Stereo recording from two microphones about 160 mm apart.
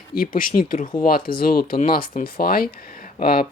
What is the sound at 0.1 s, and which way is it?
Speech, 60° left (ahead or behind).